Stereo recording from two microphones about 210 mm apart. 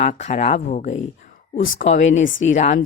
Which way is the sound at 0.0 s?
35° left (ahead or behind).